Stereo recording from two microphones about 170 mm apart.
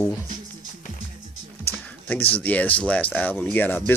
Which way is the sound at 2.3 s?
10° left (ahead or behind).